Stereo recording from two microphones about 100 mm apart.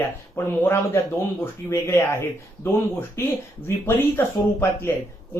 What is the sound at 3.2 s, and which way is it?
Speech, 25° left (ahead or behind).